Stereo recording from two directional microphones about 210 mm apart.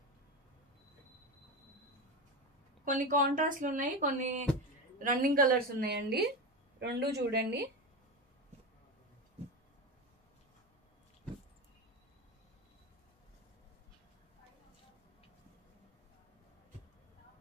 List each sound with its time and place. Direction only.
2.8 s a woman's voice: 40° right (ahead or behind)